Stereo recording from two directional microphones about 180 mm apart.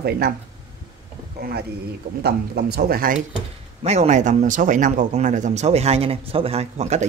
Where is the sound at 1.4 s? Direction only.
60° right (ahead or behind).